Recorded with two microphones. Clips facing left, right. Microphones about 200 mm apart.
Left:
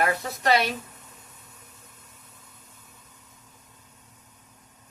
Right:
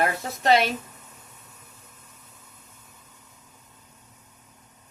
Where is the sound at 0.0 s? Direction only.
25° right (ahead or behind).